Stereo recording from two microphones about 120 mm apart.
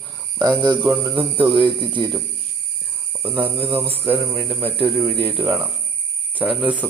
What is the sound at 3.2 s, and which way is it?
Speech, 15° right (ahead or behind).